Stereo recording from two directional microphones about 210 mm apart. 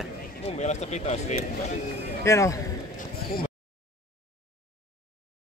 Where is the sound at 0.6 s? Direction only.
35° left (ahead or behind).